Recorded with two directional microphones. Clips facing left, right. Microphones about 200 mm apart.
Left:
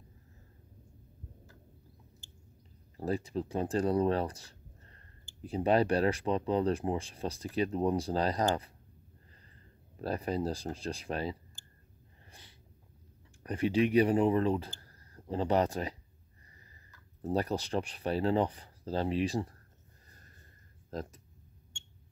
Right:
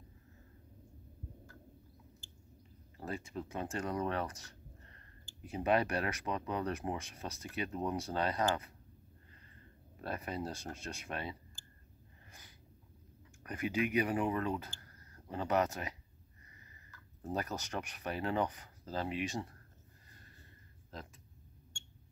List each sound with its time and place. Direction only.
3.0 s speech: 35° left (ahead or behind)
10.0 s speech: 35° left (ahead or behind)
12.3 s snort: 30° left (ahead or behind)
13.4 s speech: 30° left (ahead or behind)
14.8 s a sound: 30° left (ahead or behind)
17.3 s speech: 30° left (ahead or behind)
20.9 s speech: 40° left (ahead or behind)